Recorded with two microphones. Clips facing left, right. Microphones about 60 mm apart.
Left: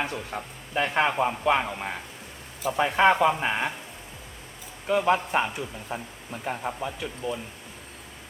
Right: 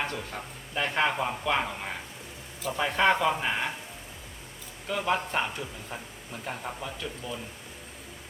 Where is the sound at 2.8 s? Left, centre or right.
Centre.